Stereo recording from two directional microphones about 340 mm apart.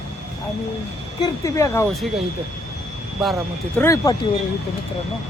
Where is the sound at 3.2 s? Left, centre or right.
Centre.